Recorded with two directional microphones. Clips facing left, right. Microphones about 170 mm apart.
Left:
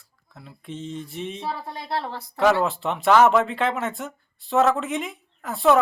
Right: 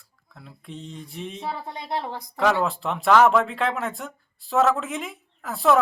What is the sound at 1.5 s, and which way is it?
Speech, 20° right (ahead or behind).